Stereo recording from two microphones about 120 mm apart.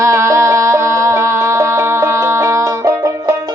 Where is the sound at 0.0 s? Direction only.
25° right (ahead or behind).